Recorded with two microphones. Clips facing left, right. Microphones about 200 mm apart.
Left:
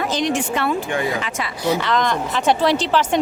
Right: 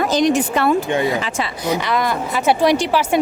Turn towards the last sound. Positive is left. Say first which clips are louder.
# right 2 dB
turn(degrees=-10)  # may be behind; listen again after turning